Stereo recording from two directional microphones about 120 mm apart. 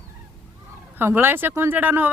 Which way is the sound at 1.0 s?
20° right (ahead or behind).